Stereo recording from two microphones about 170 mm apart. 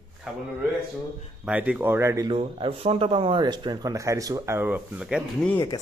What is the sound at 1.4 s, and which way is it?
Speech, 5° right (ahead or behind).